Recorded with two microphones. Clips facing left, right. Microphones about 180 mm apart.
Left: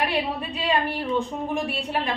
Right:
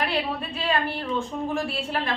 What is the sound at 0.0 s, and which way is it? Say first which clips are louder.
A woman's voice: left 1 dB; 15° left (ahead or behind).